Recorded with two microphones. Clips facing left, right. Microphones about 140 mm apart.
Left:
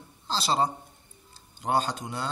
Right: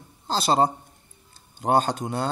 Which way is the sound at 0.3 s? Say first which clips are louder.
Right 5 dB; 50° right (ahead or behind).